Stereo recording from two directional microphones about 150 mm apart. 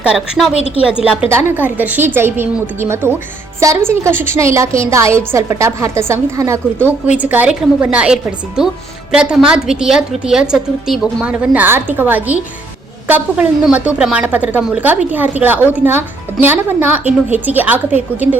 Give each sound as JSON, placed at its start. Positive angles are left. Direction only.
{"t": 0.0, "sound": "a woman's voice", "side_deg": -5}
{"t": 17.1, "sound": "a woman's voice", "side_deg": -50}
{"t": 17.4, "sound": "a woman's voice", "side_deg": -10}